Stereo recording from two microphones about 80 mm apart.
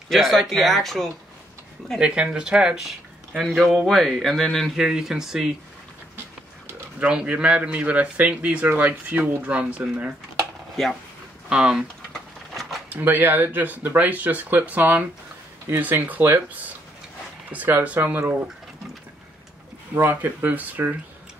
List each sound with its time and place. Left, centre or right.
0.1 s speech: centre
2.0 s a man's voice: centre
4.8 s a man's voice: centre
7.0 s a man's voice: centre
11.4 s a man's voice: centre
12.1 s a sound: centre
12.9 s speech: right
17.5 s speech: right
20.0 s speech: right